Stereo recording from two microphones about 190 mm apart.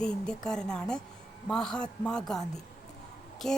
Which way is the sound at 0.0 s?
5° left (ahead or behind).